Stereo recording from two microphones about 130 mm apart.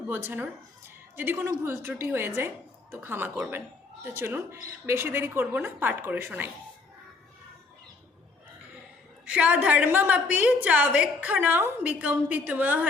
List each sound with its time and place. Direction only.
0.1 s a woman's voice: 15° right (ahead or behind)
9.3 s a woman's voice: 10° right (ahead or behind)